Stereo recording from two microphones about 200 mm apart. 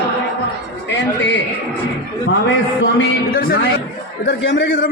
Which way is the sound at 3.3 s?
50° left (ahead or behind).